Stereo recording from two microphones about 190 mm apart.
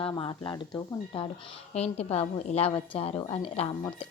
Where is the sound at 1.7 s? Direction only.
35° left (ahead or behind).